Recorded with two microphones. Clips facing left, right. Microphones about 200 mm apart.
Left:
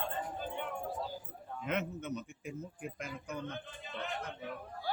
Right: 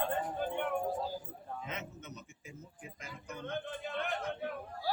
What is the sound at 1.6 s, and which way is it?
Speech, 60° left (ahead or behind).